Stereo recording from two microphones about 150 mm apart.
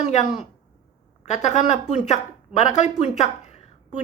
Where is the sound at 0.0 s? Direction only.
50° left (ahead or behind).